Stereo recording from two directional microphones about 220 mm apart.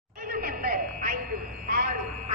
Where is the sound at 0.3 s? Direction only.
40° right (ahead or behind).